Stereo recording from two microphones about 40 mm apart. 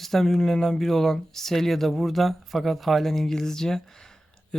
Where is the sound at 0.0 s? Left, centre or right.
Centre.